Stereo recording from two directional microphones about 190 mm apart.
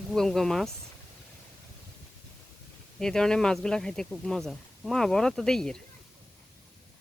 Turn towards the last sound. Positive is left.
turn(degrees=5)  # may be behind; listen again after turning